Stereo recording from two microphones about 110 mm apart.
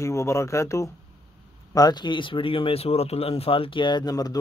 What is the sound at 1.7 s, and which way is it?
Speech, 35° left (ahead or behind).